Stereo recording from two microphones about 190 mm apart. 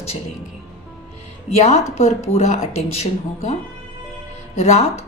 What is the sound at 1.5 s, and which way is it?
A woman's voice, 35° left (ahead or behind).